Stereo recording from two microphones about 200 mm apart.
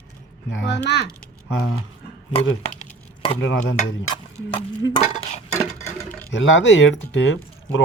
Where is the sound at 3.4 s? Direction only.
65° left (ahead or behind).